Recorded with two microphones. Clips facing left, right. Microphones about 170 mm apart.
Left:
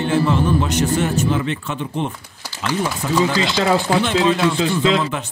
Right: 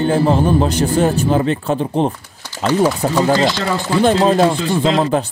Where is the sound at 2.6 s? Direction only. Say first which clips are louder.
Right 7 dB; 45° right (ahead or behind).